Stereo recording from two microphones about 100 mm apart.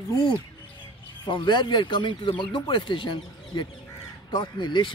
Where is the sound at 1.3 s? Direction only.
55° left (ahead or behind).